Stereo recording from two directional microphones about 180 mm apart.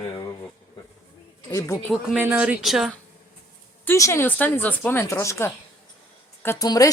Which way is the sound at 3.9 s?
15° left (ahead or behind).